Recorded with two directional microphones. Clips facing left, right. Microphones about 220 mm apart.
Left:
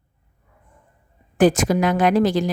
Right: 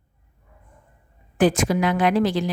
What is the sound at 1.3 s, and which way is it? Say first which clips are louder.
Speech: left 3 dB; 45° left (ahead or behind).